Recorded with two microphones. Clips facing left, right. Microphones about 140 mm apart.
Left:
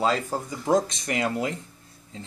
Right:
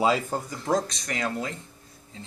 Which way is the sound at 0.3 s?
10° left (ahead or behind).